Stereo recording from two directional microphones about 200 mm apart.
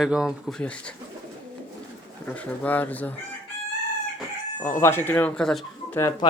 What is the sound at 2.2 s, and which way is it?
Speech, 5° left (ahead or behind).